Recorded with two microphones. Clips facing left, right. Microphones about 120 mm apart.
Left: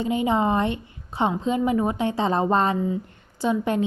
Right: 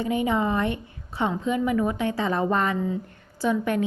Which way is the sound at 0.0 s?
25° left (ahead or behind).